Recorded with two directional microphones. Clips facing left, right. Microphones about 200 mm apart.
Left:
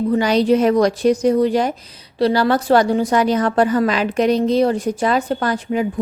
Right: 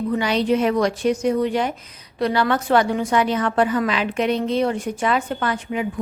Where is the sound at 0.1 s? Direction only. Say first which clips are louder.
Left 5 dB; 40° left (ahead or behind).